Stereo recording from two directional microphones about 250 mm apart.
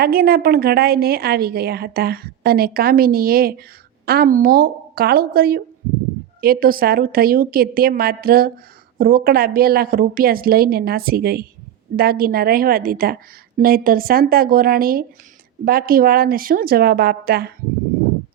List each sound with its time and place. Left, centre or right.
0.0 s a woman's voice: right